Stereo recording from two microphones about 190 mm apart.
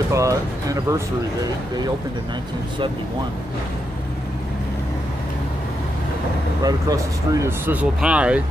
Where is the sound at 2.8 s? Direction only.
25° right (ahead or behind).